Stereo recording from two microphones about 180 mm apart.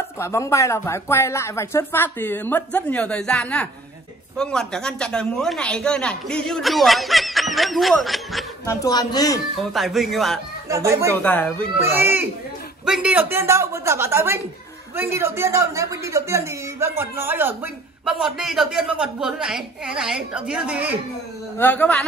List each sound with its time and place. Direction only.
0.2 s a woman's voice: 15° left (ahead or behind); by 8.5 s centre (ahead or behind)
8.6 s a woman's voice: 20° left (ahead or behind)
9.6 s a woman's voice: centre (ahead or behind)
10.7 s a woman's voice: 15° right (ahead or behind)
11.2 s speech: 10° left (ahead or behind)
11.8 s a woman's voice: 10° right (ahead or behind)
21.5 s speech: 10° left (ahead or behind)